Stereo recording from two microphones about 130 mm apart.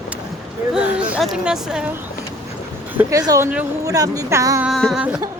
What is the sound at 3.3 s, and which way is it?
Speech, 15° right (ahead or behind).